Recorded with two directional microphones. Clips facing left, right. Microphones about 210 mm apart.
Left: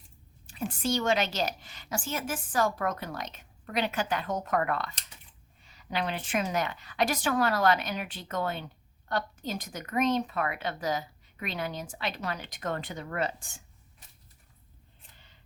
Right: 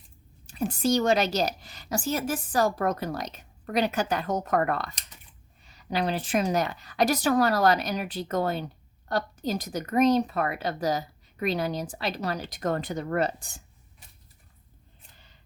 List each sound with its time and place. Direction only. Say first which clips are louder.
0.4 s a woman's voice: right 5 dB; 40° right (ahead or behind)